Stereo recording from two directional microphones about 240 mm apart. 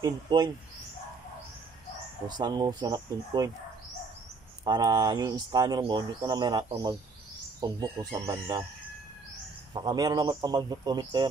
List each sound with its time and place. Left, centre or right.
0.0 s speech: centre
2.2 s speech: centre
4.6 s speech: centre
9.8 s speech: centre